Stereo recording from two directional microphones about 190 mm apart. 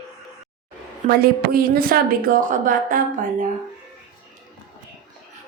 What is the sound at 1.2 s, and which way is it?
A woman's voice, 50° right (ahead or behind).